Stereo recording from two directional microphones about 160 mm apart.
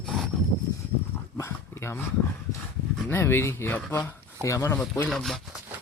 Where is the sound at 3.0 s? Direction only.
15° left (ahead or behind).